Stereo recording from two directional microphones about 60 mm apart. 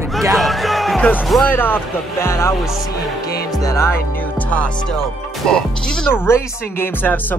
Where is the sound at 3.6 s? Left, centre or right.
Left.